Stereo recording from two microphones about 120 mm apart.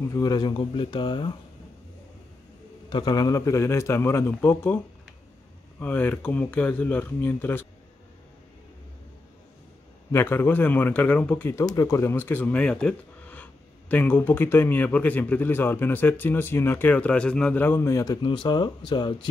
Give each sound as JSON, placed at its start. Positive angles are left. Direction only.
{"t": 0.1, "sound": "speech", "side_deg": 35}
{"t": 2.9, "sound": "a man's voice", "side_deg": 35}
{"t": 5.8, "sound": "speech", "side_deg": 15}
{"t": 10.1, "sound": "speech", "side_deg": 20}
{"t": 11.6, "sound": "speech", "side_deg": 30}